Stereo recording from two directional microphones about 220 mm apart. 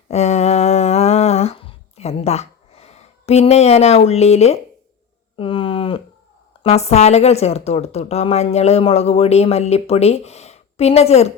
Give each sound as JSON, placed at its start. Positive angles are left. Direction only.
{"t": 0.1, "sound": "humming", "side_deg": 30}
{"t": 5.4, "sound": "a sound", "side_deg": 25}
{"t": 6.6, "sound": "a woman's voice", "side_deg": 30}